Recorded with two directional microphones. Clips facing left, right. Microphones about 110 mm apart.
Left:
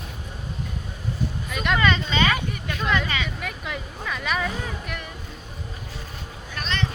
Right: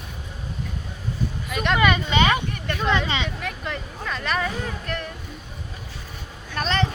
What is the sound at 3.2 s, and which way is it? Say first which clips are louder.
Speech: right 2 dB; 5° left (ahead or behind).